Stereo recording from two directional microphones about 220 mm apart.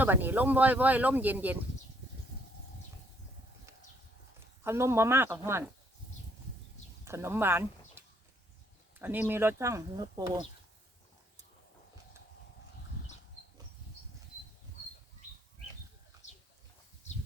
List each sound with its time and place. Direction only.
0.0 s speech: 10° right (ahead or behind)
4.6 s speech: 10° right (ahead or behind)
7.0 s speech: 10° right (ahead or behind)